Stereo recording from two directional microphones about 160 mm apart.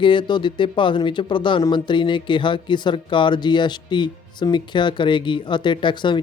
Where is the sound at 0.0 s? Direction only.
30° left (ahead or behind).